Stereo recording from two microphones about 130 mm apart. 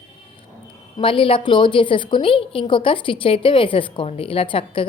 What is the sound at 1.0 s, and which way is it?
A woman's voice, 40° left (ahead or behind).